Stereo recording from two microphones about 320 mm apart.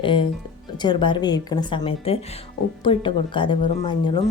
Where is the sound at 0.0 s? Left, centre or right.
Centre.